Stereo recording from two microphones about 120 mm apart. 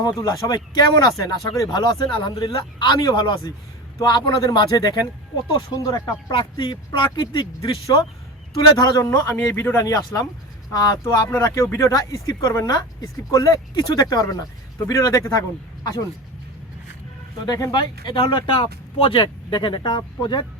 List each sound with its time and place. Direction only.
0.0 s a man's voice: 35° left (ahead or behind)
6.3 s a man's voice: 45° left (ahead or behind)
17.4 s speech: 35° left (ahead or behind)